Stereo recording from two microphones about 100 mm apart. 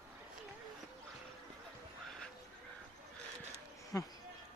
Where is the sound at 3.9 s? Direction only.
30° left (ahead or behind).